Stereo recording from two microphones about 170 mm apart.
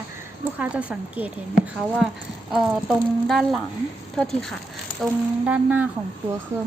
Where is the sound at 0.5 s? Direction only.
10° right (ahead or behind).